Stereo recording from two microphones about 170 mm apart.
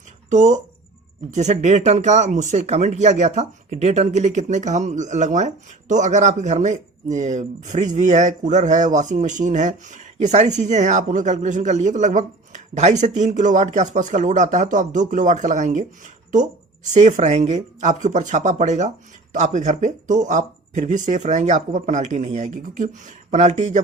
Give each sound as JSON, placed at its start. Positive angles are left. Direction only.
{"t": 0.3, "sound": "speech", "side_deg": -45}